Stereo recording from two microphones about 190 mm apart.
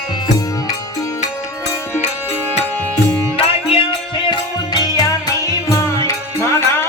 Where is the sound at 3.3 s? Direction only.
30° left (ahead or behind).